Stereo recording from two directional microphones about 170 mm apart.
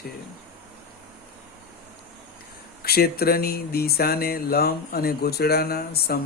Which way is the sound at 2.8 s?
65° left (ahead or behind).